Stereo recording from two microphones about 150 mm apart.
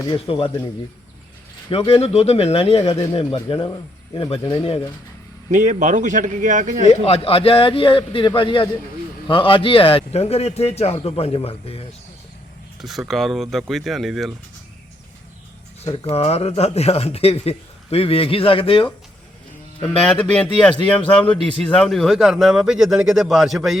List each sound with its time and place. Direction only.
0.3 s speech: 35° left (ahead or behind)
1.7 s speech: 40° left (ahead or behind)
5.5 s speech: 55° right (ahead or behind)
6.8 s speech: 40° left (ahead or behind)
12.8 s a man's voice: centre (ahead or behind)
15.8 s speech: 40° left (ahead or behind)
20.0 s a man's voice: 10° left (ahead or behind)